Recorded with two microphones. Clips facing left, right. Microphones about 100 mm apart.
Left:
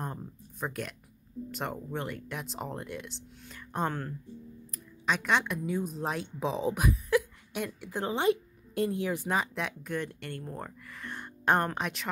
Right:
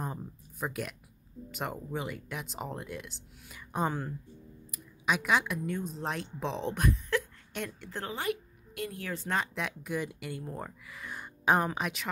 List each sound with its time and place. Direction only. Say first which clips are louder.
0.0 s a sound: even; centre (ahead or behind)
1.5 s a woman's voice: even; 5° right (ahead or behind)
8.0 s a woman's voice: left 7 dB; 25° left (ahead or behind)
9.0 s speech: left 4 dB; 15° left (ahead or behind)
9.4 s speech: left 1 dB; centre (ahead or behind)